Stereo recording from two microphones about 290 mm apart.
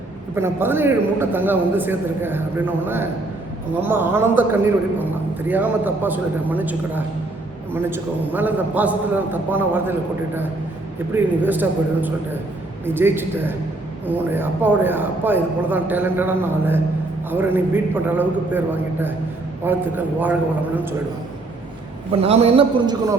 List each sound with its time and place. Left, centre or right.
0.3 s a man's voice: centre
11.1 s a man's voice: centre
22.1 s a man's voice: centre